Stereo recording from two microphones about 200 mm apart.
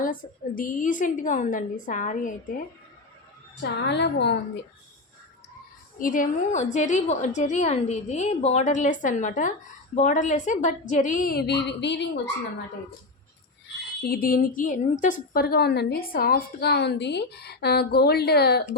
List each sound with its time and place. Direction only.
0.0 s a woman's voice: 45° left (ahead or behind)
3.6 s a woman's voice: 60° left (ahead or behind)
6.0 s a woman's voice: 40° left (ahead or behind); by 12.2 s 60° left (ahead or behind)
14.0 s a woman's voice: 45° left (ahead or behind)